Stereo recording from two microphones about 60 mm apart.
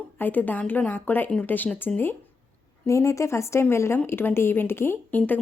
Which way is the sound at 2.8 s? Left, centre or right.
Left.